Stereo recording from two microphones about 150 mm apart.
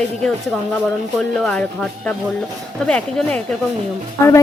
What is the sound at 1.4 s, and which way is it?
A woman's voice, 5° left (ahead or behind).